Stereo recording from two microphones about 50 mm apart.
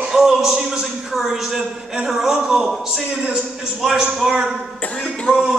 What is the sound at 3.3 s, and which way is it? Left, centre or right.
A man's voice, centre.